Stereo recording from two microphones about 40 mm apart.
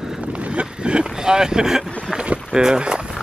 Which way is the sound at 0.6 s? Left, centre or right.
Right.